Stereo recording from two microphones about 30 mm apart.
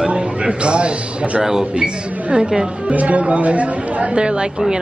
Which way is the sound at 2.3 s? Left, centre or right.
Right.